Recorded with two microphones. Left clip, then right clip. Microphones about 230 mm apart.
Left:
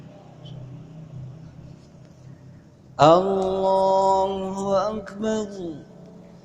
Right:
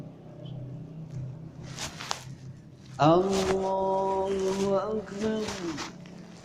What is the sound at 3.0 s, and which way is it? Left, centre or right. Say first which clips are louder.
Speech: left 7 dB; left.